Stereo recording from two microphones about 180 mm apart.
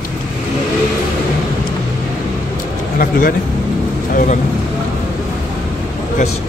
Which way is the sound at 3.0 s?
50° left (ahead or behind).